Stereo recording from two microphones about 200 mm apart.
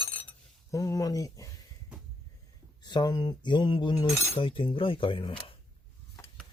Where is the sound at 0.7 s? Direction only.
15° left (ahead or behind).